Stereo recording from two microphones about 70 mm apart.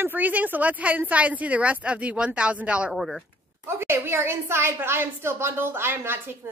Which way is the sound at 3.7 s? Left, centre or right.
Right.